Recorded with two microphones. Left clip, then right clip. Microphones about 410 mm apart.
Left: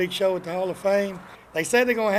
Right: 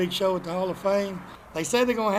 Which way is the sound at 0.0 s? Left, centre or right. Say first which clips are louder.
Left 2 dB; left.